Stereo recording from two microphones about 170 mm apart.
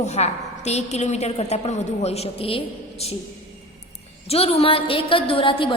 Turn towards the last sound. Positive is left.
turn(degrees=30)  # may be behind; listen again after turning